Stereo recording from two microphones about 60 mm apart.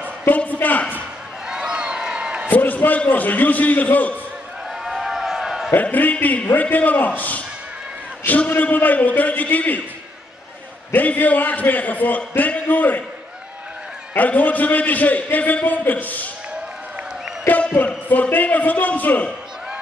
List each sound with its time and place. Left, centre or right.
0.3 s a man's voice: left
1.5 s a sound: centre
2.5 s a man's voice: left
4.8 s a sound: centre
5.8 s a man's voice: left
8.5 s a man's voice: left
10.9 s a man's voice: left
14.1 s a man's voice: left
17.7 s a man's voice: left